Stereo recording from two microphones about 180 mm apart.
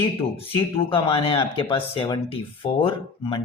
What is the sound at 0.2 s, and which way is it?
Speech, 30° left (ahead or behind).